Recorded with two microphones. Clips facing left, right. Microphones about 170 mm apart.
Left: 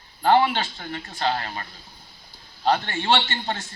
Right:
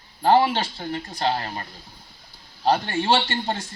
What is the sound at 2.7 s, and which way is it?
Speech, 10° right (ahead or behind).